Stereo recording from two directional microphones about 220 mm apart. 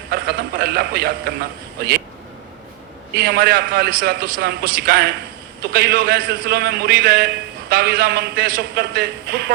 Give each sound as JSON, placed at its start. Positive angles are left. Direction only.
{"t": 0.1, "sound": "a man's voice", "side_deg": -45}
{"t": 3.2, "sound": "a man's voice", "side_deg": -45}